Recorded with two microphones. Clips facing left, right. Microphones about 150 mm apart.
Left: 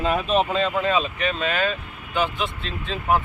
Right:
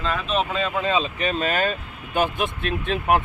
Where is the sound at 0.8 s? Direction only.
25° right (ahead or behind).